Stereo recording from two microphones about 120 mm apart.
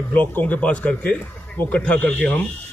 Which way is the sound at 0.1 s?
15° left (ahead or behind).